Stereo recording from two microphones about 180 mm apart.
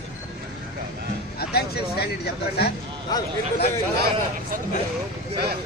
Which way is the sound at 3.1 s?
20° left (ahead or behind).